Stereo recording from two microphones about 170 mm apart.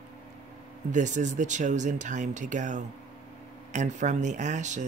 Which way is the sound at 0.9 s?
45° right (ahead or behind).